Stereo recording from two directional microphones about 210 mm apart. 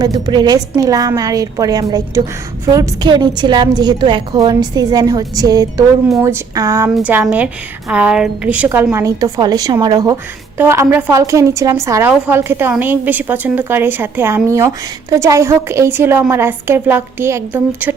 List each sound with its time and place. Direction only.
0.0 s a woman's voice: 20° right (ahead or behind)